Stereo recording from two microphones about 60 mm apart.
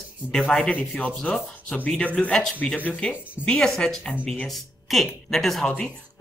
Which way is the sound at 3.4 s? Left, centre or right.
Right.